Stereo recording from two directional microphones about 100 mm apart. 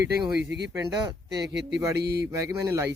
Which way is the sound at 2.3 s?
30° right (ahead or behind).